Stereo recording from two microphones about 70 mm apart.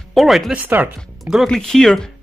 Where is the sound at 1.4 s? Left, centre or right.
Centre.